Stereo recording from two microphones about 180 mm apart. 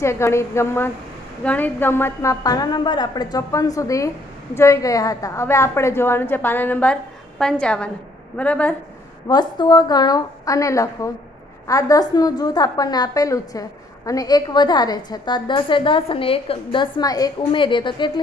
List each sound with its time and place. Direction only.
0.0 s a woman's voice: 15° left (ahead or behind)
9.3 s a woman's voice: 25° left (ahead or behind)